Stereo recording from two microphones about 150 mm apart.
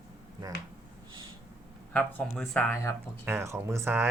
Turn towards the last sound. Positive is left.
turn(degrees=-15)  # may be behind; listen again after turning